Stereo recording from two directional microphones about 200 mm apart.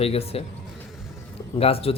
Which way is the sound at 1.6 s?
30° left (ahead or behind).